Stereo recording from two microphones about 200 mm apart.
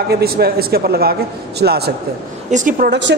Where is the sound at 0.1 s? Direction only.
50° right (ahead or behind).